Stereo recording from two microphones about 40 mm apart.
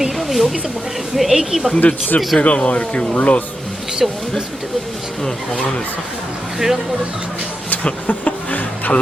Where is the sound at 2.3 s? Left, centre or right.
Left.